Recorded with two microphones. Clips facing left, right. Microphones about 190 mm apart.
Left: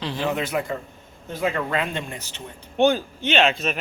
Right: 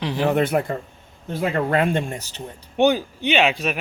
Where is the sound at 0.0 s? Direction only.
15° right (ahead or behind).